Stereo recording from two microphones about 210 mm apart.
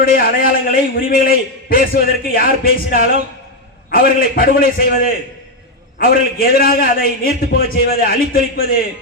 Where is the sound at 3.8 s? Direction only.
45° left (ahead or behind).